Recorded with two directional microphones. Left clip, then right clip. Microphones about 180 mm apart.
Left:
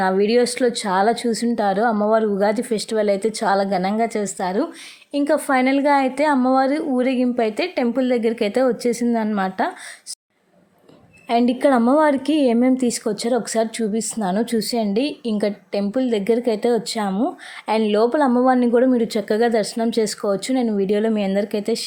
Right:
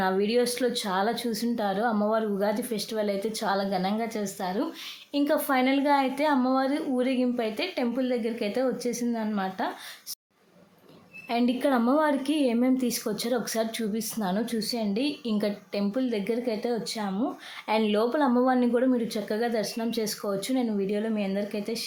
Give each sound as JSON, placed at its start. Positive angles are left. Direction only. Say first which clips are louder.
{"t": 0.0, "sound": "a woman's voice", "louder": "left 8 dB", "side_deg": 35}
{"t": 11.3, "sound": "a woman's voice", "louder": "left 9 dB", "side_deg": 40}